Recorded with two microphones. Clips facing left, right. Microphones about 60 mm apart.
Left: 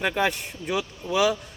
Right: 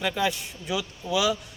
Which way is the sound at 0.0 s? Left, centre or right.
Left.